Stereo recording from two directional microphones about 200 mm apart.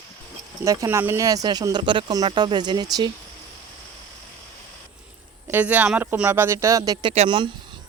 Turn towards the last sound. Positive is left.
turn(degrees=-25)  # may be behind; listen again after turning